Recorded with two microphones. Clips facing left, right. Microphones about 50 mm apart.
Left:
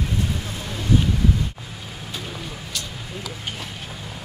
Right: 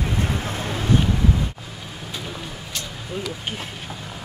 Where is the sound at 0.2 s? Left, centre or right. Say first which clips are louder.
Right 3 dB; right.